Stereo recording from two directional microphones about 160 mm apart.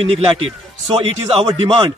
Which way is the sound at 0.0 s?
35° right (ahead or behind).